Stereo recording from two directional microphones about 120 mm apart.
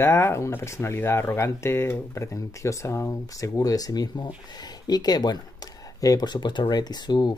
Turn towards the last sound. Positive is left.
turn(degrees=35)  # may be behind; listen again after turning